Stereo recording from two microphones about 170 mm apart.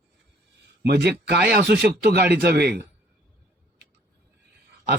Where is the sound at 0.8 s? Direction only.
75° right (ahead or behind).